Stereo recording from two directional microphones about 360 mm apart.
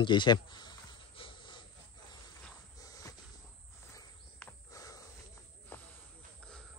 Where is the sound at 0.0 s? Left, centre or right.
Centre.